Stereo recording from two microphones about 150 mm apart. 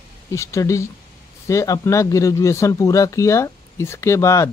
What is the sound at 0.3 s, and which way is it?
Speech, 20° left (ahead or behind).